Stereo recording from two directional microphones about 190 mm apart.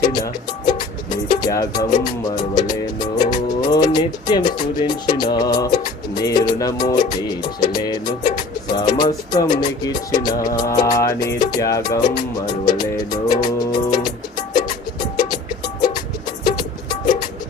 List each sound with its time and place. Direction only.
0.0 s music: 20° left (ahead or behind)
15.0 s cowbell: 20° left (ahead or behind)
16.5 s music: 20° left (ahead or behind)